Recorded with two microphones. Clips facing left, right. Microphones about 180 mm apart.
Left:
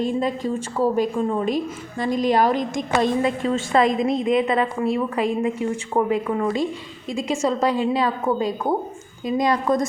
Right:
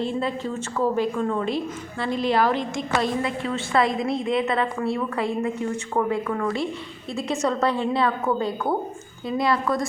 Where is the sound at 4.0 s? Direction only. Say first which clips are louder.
Left 4 dB; 20° left (ahead or behind).